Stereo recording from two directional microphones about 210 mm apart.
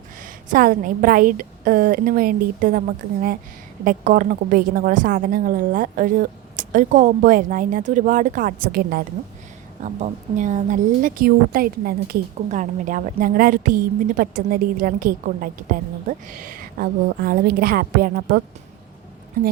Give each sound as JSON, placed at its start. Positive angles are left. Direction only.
{"t": 0.2, "sound": "a woman's voice", "side_deg": -40}